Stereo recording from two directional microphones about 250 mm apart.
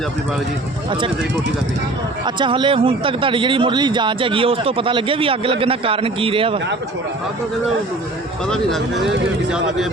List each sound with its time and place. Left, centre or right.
2.2 s speech: centre
8.4 s speech: centre